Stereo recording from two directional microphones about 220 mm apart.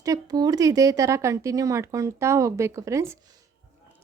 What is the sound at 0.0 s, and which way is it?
A woman's voice, 15° right (ahead or behind).